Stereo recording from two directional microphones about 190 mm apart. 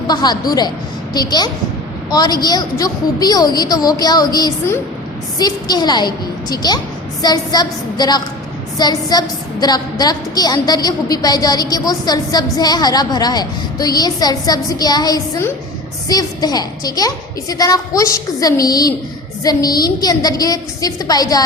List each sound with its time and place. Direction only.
0.1 s a woman's voice: 20° left (ahead or behind)